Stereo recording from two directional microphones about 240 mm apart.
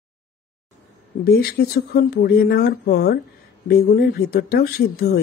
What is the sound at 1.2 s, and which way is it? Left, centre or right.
Speech, left.